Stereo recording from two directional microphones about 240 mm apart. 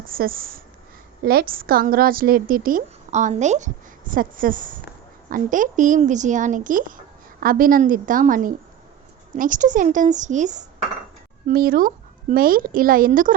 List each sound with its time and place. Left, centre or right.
0.1 s a woman's voice: right